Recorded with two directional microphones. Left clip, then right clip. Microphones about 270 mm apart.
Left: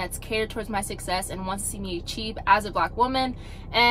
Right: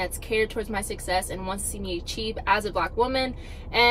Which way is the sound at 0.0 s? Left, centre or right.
Centre.